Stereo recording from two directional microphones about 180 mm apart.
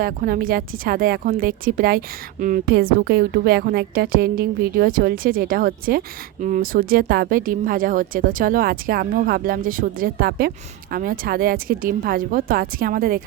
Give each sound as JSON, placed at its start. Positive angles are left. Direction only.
{"t": 0.0, "sound": "a woman's voice", "side_deg": -55}